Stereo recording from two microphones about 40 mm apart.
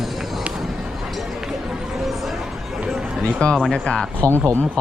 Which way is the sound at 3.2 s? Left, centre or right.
Left.